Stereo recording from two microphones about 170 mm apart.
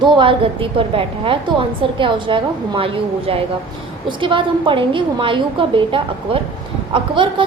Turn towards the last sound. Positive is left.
turn(degrees=-30)  # may be behind; listen again after turning